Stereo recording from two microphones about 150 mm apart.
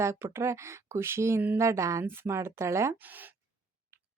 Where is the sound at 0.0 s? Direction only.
20° right (ahead or behind).